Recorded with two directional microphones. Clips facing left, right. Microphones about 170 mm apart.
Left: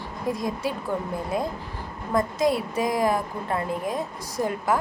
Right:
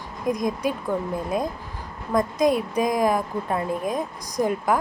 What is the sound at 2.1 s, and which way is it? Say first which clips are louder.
Speech: right 2 dB; 20° right (ahead or behind).